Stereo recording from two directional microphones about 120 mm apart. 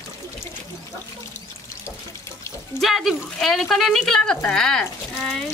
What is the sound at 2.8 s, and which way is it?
Speech, centre (ahead or behind).